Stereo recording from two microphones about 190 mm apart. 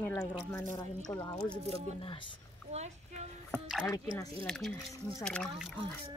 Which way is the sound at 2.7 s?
35° right (ahead or behind).